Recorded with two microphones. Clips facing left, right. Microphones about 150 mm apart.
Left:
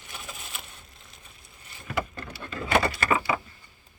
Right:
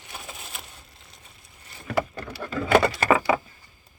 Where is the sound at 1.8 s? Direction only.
90° right.